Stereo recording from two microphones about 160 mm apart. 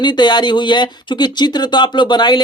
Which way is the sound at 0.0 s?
30° left (ahead or behind).